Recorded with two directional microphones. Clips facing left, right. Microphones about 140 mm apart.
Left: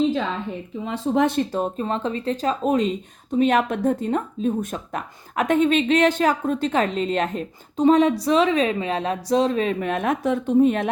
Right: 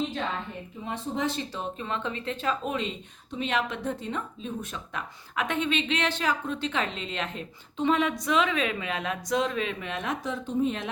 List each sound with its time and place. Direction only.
0.9 s speech: 75° left (ahead or behind); by 10.8 s 60° left (ahead or behind)